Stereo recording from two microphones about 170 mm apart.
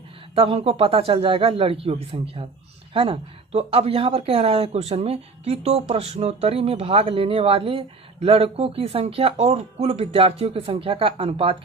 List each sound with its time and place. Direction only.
0.3 s speech: 35° right (ahead or behind)